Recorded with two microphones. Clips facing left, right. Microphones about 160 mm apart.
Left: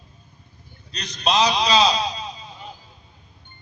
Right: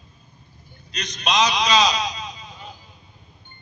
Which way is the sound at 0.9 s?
35° left (ahead or behind).